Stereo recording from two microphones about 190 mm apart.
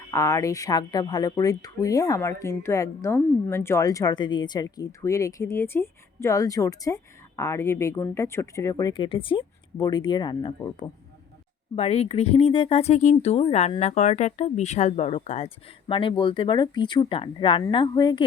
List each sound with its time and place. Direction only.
0.1 s speech: 15° left (ahead or behind)
11.8 s speech: 35° left (ahead or behind)